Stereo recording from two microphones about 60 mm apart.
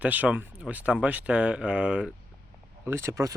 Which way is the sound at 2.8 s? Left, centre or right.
Right.